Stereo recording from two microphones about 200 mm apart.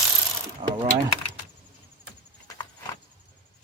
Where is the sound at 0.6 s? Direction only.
25° right (ahead or behind).